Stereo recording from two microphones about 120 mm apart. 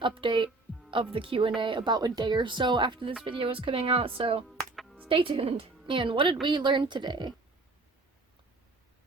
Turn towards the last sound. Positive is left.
turn(degrees=-35)  # may be behind; listen again after turning